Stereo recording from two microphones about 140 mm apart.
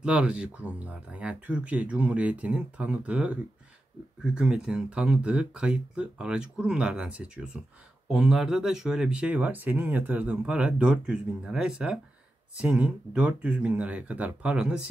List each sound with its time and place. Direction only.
0.0 s speech: 5° right (ahead or behind)